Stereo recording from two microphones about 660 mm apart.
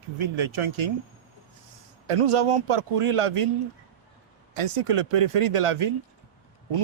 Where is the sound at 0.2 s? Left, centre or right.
Right.